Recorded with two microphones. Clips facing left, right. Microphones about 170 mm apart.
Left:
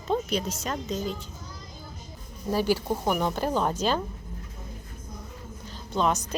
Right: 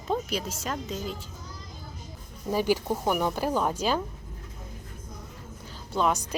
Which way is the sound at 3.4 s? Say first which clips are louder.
Left 1 dB; 10° right (ahead or behind).